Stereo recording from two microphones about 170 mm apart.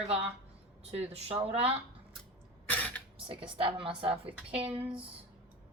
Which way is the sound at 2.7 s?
10° left (ahead or behind).